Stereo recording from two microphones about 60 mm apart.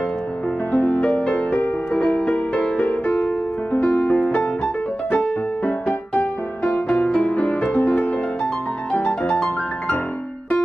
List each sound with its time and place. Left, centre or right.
0.9 s music: centre
1.3 s music: left
2.0 s music: centre